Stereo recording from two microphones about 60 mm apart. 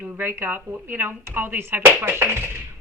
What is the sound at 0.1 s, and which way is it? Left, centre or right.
Speech, right.